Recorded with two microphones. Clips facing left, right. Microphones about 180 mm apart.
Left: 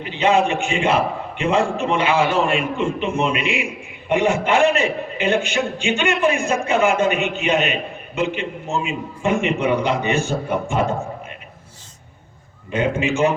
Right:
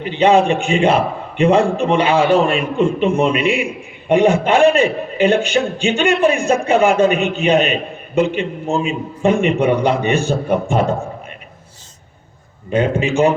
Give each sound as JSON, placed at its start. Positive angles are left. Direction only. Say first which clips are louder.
{"t": 0.0, "sound": "a man's voice", "louder": "right 5 dB", "side_deg": -35}
{"t": 12.7, "sound": "a man's voice", "louder": "right 4 dB", "side_deg": -35}